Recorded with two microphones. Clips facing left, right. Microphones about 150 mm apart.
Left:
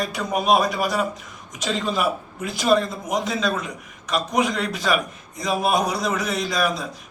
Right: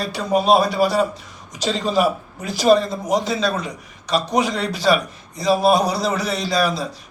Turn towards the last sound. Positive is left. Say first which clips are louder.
# right 3 dB
turn(degrees=-35)  # may be behind; listen again after turning